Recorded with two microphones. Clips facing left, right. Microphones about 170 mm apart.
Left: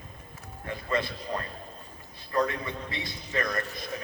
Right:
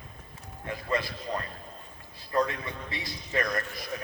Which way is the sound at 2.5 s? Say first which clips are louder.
Left 2 dB; 25° left (ahead or behind).